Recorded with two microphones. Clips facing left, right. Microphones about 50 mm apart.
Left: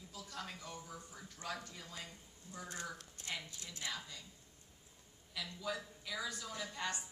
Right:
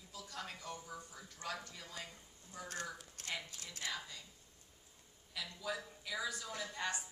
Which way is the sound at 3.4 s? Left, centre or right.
Left.